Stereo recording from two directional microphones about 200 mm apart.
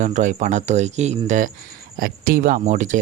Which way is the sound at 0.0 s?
35° right (ahead or behind).